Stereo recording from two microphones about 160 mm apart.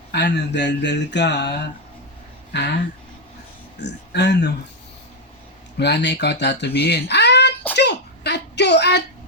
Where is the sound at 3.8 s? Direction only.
90° left.